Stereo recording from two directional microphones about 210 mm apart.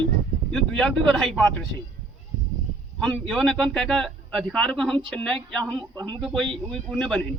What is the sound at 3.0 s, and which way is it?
Speech, centre (ahead or behind).